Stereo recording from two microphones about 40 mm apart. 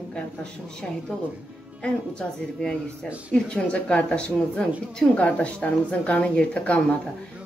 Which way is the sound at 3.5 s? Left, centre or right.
Left.